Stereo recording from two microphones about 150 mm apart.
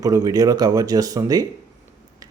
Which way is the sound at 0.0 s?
25° right (ahead or behind).